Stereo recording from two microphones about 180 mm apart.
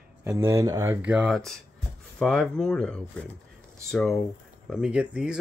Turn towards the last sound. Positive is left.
turn(degrees=-5)  # may be behind; listen again after turning